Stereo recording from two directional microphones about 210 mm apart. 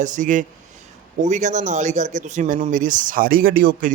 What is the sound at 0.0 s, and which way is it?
Speech, 35° right (ahead or behind).